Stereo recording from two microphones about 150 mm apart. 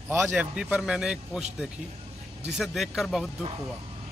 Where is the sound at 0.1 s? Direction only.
10° right (ahead or behind).